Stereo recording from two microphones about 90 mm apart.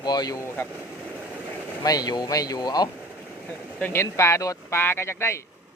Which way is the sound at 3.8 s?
20° left (ahead or behind).